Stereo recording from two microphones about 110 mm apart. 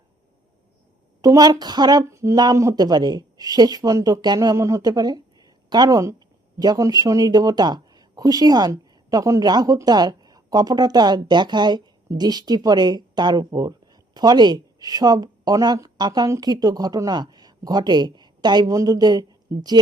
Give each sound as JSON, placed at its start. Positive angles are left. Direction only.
{"t": 1.2, "sound": "speech", "side_deg": -35}
{"t": 4.5, "sound": "a woman's voice", "side_deg": -30}